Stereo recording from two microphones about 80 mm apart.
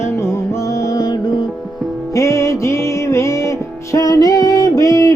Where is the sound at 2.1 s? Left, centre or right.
Left.